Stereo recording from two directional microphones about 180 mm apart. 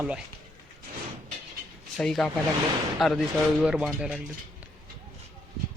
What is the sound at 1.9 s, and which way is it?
Speech, centre (ahead or behind).